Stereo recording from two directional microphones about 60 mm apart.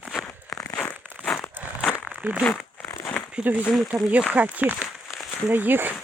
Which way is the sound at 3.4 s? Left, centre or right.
Right.